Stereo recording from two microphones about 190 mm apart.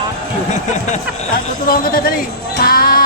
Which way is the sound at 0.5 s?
45° left (ahead or behind).